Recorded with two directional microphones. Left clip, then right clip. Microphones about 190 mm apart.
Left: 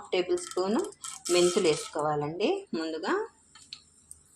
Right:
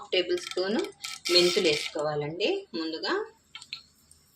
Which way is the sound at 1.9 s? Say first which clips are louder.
Left 1 dB; 5° left (ahead or behind).